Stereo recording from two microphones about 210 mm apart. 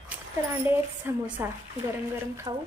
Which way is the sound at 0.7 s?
10° right (ahead or behind).